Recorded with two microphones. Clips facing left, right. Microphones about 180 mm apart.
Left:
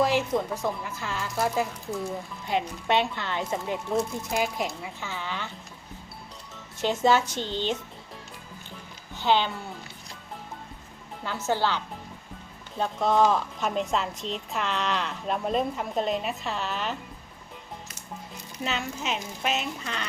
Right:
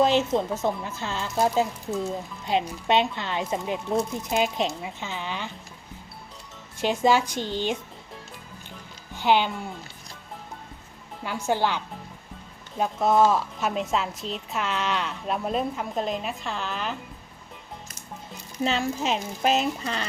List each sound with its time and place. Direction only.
0.0 s speech: 25° right (ahead or behind)
6.8 s a woman's voice: 15° right (ahead or behind)
9.1 s speech: 15° right (ahead or behind)
11.4 s a woman's voice: 15° right (ahead or behind)
12.8 s a woman's voice: 10° right (ahead or behind)
18.6 s speech: 30° right (ahead or behind)